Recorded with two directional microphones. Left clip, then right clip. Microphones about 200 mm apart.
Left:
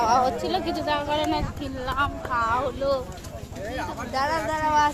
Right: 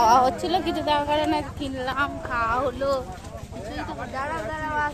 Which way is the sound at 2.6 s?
45° right (ahead or behind).